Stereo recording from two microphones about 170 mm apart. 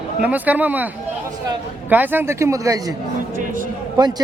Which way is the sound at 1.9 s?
10° right (ahead or behind).